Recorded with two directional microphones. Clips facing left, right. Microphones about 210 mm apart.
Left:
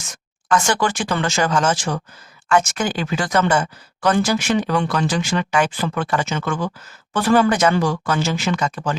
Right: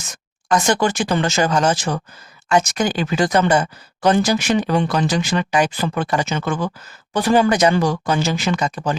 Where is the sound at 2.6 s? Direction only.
40° right (ahead or behind).